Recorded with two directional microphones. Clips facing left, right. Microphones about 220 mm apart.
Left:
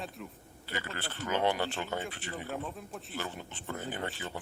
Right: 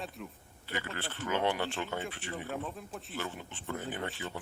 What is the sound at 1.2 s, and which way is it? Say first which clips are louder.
Speech: left 1 dB; 35° left (ahead or behind).